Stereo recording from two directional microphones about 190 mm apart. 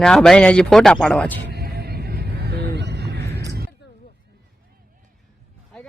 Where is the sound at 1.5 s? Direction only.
55° right (ahead or behind).